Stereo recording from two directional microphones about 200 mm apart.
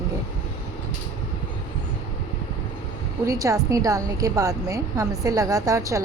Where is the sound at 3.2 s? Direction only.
15° right (ahead or behind).